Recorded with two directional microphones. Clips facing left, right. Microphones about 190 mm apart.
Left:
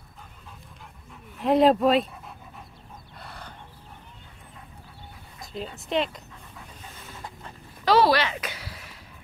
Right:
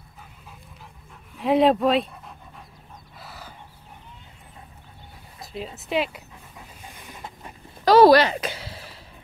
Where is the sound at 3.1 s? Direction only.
5° right (ahead or behind).